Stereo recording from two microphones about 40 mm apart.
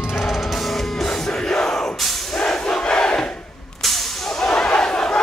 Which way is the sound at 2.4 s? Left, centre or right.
Left.